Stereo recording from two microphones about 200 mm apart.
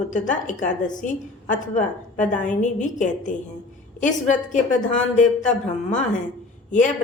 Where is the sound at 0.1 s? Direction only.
40° left (ahead or behind).